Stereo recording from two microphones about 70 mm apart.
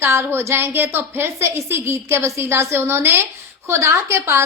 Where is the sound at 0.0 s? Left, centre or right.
Right.